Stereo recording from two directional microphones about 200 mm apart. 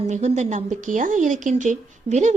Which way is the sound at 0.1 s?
35° right (ahead or behind).